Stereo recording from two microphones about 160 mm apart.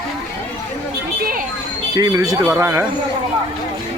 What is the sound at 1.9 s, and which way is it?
Speech, 20° right (ahead or behind).